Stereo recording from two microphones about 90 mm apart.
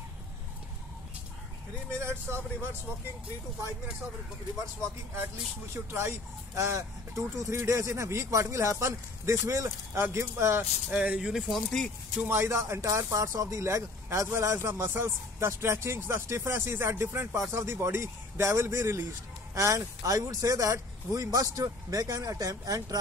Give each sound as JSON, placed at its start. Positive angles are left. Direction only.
{"t": 2.0, "sound": "a man's voice", "side_deg": -30}
{"t": 5.9, "sound": "speech", "side_deg": -30}
{"t": 10.9, "sound": "speech", "side_deg": -10}
{"t": 12.2, "sound": "speech", "side_deg": -25}